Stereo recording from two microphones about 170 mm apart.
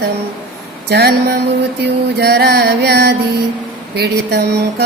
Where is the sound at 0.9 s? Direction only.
70° right (ahead or behind).